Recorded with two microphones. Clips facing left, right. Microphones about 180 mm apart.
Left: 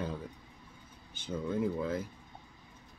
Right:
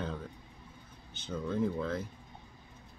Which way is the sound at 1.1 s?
10° left (ahead or behind).